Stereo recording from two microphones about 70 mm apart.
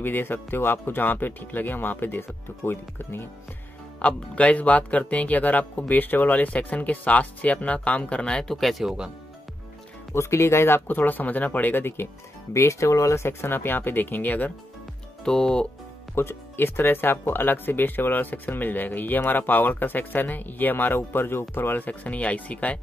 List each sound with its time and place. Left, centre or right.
0.0 s speech: left
4.0 s speech: centre
10.1 s speech: left
11.0 s speech: left
12.5 s speech: left
15.2 s speech: centre
16.2 s speech: left